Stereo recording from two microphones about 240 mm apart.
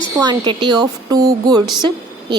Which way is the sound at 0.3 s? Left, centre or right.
Centre.